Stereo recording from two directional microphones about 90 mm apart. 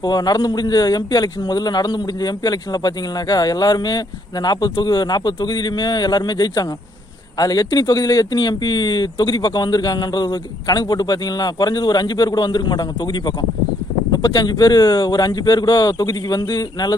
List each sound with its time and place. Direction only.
0.0 s a man's voice: 50° left (ahead or behind)